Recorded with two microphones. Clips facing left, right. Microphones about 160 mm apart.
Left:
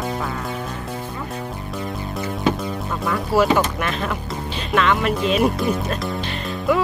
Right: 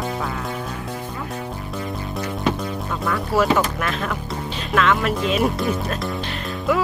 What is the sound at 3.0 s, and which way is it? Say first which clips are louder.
Music: left 2 dB; centre (ahead or behind).